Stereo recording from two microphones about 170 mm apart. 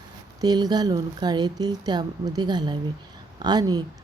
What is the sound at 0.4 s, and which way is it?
Speech, 25° right (ahead or behind).